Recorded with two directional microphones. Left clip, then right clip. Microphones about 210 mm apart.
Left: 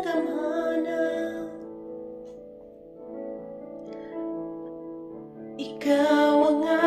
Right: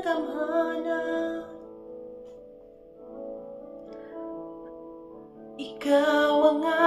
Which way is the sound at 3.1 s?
35° left (ahead or behind).